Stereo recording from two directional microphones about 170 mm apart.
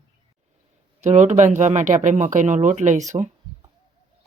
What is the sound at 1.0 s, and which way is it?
Speech, 45° right (ahead or behind).